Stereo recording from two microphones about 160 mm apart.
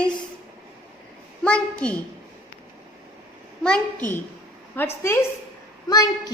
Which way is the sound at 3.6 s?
5° left (ahead or behind).